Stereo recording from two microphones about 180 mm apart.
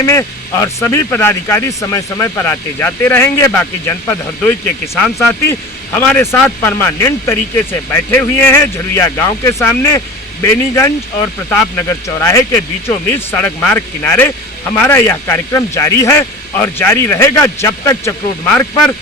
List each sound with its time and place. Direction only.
0.0 s speech: 15° left (ahead or behind)